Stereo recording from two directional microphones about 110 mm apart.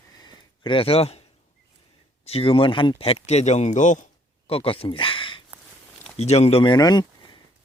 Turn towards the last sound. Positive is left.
turn(degrees=40)  # may be behind; listen again after turning